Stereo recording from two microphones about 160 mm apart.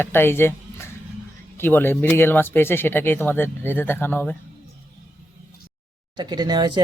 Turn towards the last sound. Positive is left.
turn(degrees=-25)  # may be behind; listen again after turning